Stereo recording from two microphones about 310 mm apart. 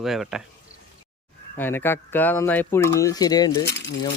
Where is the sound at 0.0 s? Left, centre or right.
Centre.